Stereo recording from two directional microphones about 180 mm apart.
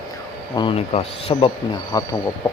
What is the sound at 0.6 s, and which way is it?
Speech, 30° left (ahead or behind).